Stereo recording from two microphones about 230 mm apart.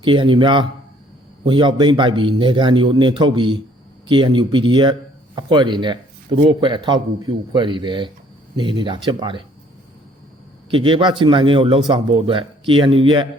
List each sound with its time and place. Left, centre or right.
0.0 s speech: right
10.7 s speech: right